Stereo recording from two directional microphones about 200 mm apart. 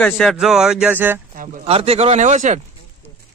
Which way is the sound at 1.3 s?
45° right (ahead or behind).